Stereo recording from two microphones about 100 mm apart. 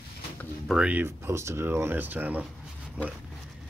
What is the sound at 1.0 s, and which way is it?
Speech, 25° right (ahead or behind).